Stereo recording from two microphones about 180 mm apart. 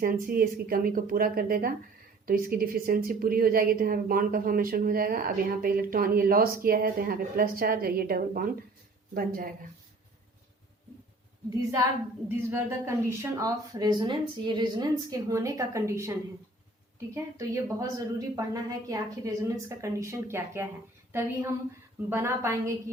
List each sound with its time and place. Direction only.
0.0 s a woman's voice: 55° right (ahead or behind)
12.5 s a woman's voice: 15° right (ahead or behind)
17.2 s a woman's voice: 20° right (ahead or behind)